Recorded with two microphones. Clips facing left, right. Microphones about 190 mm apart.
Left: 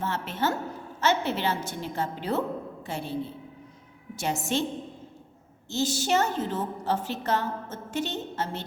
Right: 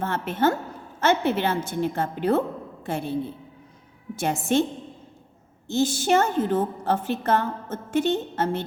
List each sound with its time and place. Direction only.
0.0 s a woman's voice: 55° right (ahead or behind)
5.6 s a woman's voice: 55° right (ahead or behind)